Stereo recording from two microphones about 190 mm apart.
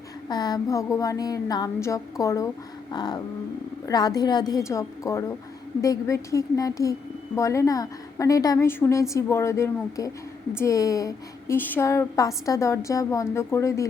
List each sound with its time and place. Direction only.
0.3 s a woman's voice: 20° left (ahead or behind)